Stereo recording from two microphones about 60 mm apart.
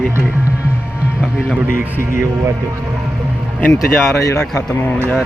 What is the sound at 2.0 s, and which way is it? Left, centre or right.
Speech, right.